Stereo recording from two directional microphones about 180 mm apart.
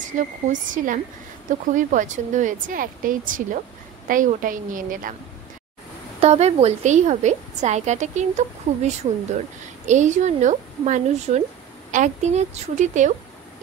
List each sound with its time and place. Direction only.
0.1 s a woman's voice: 45° right (ahead or behind)
6.2 s a woman's voice: 35° right (ahead or behind)